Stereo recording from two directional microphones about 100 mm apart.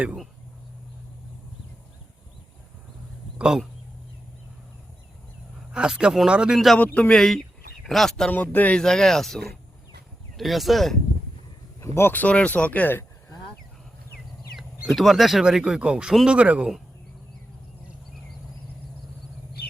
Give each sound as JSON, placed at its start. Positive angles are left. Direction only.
{"t": 3.3, "sound": "speech", "side_deg": -5}
{"t": 5.7, "sound": "speech", "side_deg": -10}
{"t": 6.7, "sound": "speech", "side_deg": 15}
{"t": 7.1, "sound": "speech", "side_deg": 5}
{"t": 8.3, "sound": "speech", "side_deg": 20}
{"t": 8.8, "sound": "speech", "side_deg": 5}
{"t": 11.9, "sound": "speech", "side_deg": 20}
{"t": 14.8, "sound": "speech", "side_deg": 0}